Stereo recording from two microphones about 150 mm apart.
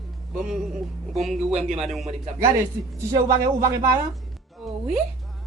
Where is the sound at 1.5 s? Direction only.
45° right (ahead or behind).